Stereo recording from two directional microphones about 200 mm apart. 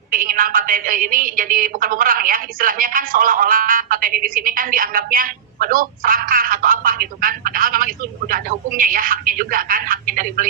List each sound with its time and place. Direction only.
0.1 s a woman's voice: 45° right (ahead or behind)